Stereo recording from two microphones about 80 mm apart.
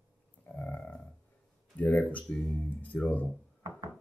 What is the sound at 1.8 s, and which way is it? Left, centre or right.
Speech, centre.